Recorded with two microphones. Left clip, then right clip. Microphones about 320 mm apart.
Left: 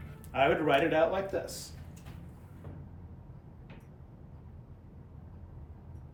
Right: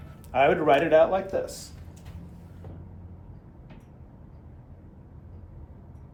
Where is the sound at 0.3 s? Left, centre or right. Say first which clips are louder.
Right 6 dB; centre.